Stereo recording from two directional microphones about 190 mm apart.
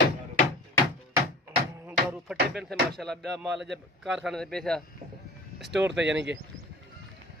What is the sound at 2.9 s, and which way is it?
Speech, centre (ahead or behind).